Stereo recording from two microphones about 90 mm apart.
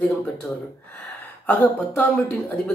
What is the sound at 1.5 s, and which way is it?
Speech, 15° left (ahead or behind).